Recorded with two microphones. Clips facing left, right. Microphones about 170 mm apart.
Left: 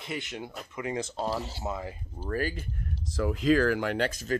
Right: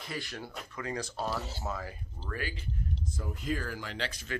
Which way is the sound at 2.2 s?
45° left (ahead or behind).